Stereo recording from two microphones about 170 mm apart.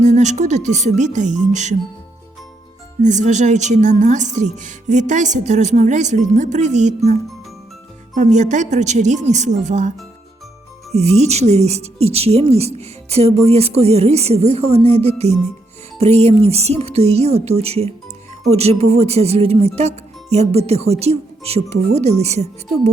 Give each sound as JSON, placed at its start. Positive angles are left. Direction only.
{"t": 0.0, "sound": "a woman's voice", "side_deg": -45}
{"t": 3.0, "sound": "a woman's voice", "side_deg": -45}
{"t": 10.9, "sound": "speech", "side_deg": -40}